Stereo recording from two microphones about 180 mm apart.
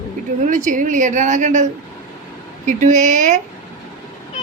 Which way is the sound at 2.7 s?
40° right (ahead or behind).